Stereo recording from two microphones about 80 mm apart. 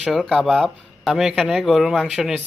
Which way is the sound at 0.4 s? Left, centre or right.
Centre.